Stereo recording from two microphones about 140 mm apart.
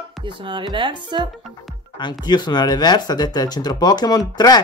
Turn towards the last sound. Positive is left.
turn(degrees=30)  # may be behind; listen again after turning